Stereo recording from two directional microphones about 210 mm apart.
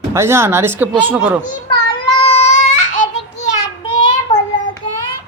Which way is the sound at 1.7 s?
20° left (ahead or behind).